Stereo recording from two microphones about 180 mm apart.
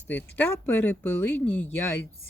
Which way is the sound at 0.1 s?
10° left (ahead or behind).